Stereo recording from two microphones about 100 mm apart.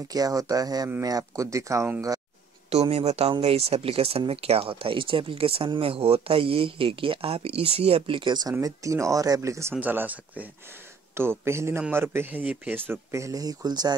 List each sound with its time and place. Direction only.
0.1 s speech: 40° right (ahead or behind)
2.7 s speech: 90° right; by 8.4 s 55° right (ahead or behind)
8.5 s speech: 35° right (ahead or behind)
9.8 s speech: 15° right (ahead or behind); by 13.9 s 40° right (ahead or behind)